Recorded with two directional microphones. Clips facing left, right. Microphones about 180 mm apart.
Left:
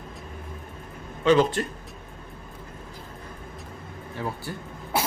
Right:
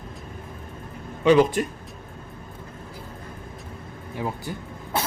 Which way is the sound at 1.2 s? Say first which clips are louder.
Right 3 dB; 10° right (ahead or behind).